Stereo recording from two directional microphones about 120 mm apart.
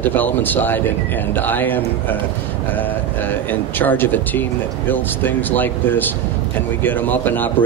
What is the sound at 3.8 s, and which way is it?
Speech, 15° left (ahead or behind).